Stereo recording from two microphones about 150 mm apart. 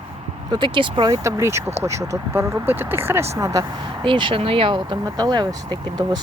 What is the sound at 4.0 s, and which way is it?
Speech, 35° right (ahead or behind).